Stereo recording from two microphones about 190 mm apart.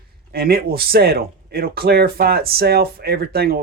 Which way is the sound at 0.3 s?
55° right (ahead or behind).